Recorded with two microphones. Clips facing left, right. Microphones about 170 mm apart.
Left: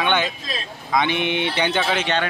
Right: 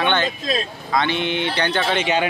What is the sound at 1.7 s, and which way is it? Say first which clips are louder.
Speech: right 1 dB; centre (ahead or behind).